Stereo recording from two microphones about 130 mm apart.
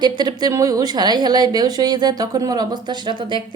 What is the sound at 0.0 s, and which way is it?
A woman's voice, 35° right (ahead or behind).